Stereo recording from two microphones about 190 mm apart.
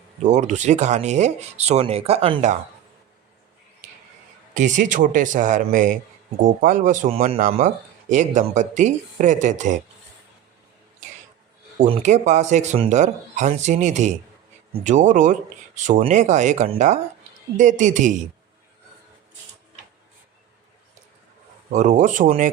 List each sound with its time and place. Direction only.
0.2 s speech: 40° right (ahead or behind)
4.5 s speech: 40° right (ahead or behind)
11.8 s speech: 40° right (ahead or behind)
21.7 s speech: 40° right (ahead or behind)